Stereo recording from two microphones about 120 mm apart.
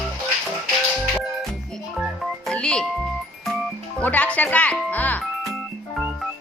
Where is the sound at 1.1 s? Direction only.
Centre (ahead or behind).